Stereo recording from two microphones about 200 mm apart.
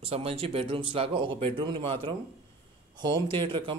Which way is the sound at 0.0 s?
30° right (ahead or behind).